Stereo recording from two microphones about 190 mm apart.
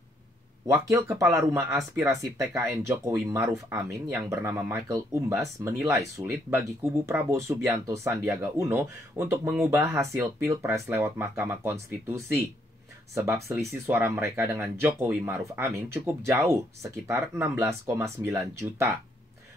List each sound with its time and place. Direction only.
0.7 s speech: 15° right (ahead or behind)